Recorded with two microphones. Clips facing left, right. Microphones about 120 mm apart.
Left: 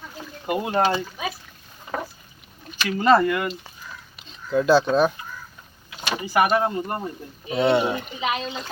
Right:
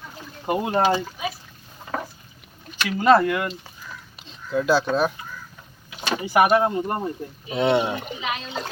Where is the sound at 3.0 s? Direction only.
5° right (ahead or behind).